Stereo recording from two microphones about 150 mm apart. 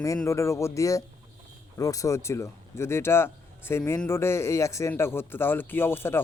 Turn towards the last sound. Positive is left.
turn(degrees=15)  # may be behind; listen again after turning